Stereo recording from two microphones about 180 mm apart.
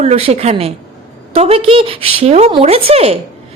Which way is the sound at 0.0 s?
35° right (ahead or behind).